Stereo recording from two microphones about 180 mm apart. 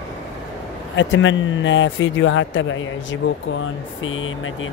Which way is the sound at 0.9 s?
90° left.